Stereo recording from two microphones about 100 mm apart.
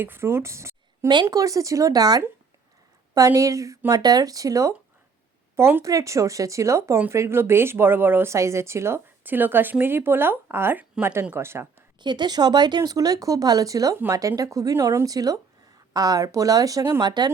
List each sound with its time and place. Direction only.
0.0 s speech: 25° right (ahead or behind)
1.0 s speech: 50° right (ahead or behind); by 11.7 s 25° right (ahead or behind)
11.9 s speech: 50° right (ahead or behind); by 17.0 s 30° right (ahead or behind)
17.0 s speech: 45° right (ahead or behind)